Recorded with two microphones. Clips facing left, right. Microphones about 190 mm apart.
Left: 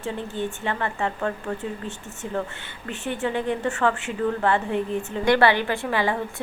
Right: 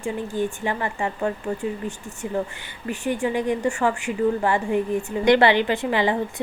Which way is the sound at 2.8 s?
10° right (ahead or behind).